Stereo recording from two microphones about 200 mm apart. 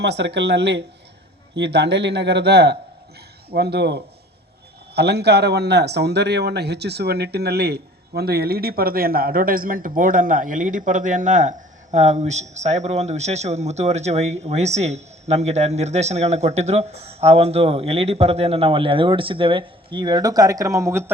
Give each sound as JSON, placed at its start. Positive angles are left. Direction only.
{"t": 0.0, "sound": "a man's voice", "side_deg": -60}